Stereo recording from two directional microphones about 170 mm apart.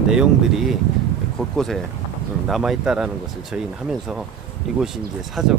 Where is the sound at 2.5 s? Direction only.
Centre (ahead or behind).